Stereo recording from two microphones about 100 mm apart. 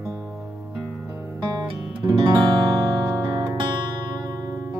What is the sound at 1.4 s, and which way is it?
Music, 40° right (ahead or behind).